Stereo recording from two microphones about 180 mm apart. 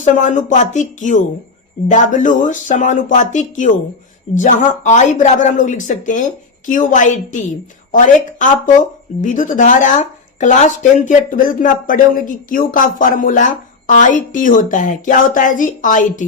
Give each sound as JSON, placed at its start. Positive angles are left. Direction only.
{"t": 0.0, "sound": "speech", "side_deg": 45}